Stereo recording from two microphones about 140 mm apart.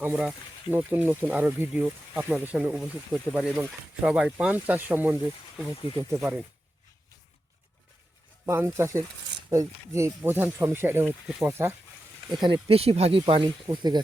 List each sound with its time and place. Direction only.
0.0 s speech: 15° right (ahead or behind)
8.4 s speech: 20° right (ahead or behind)
12.3 s speech: 35° right (ahead or behind)